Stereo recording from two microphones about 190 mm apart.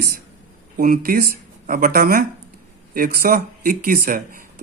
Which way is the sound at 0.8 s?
50° right (ahead or behind).